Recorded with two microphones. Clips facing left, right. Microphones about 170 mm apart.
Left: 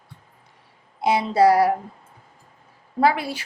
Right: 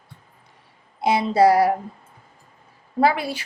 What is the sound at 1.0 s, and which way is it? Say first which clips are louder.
Speech: right 1 dB; 30° right (ahead or behind).